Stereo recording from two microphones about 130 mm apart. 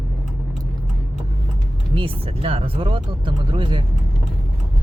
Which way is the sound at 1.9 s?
45° right (ahead or behind).